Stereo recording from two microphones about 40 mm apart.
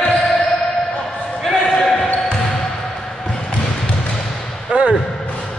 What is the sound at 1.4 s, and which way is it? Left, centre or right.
Basketball bounce, centre.